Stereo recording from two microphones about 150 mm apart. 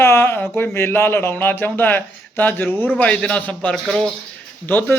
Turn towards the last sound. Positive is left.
turn(degrees=15)  # may be behind; listen again after turning